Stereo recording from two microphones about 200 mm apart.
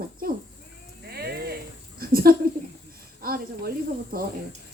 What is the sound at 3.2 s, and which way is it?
Speech, 45° right (ahead or behind).